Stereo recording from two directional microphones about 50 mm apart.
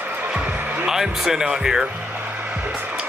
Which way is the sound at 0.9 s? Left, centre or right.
Centre.